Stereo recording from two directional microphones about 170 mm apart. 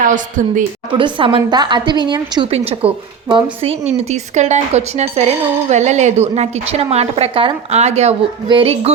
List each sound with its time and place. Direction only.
0.0 s a woman's voice: 50° right (ahead or behind)
0.9 s a woman's voice: 30° right (ahead or behind)
2.5 s speech: 35° right (ahead or behind)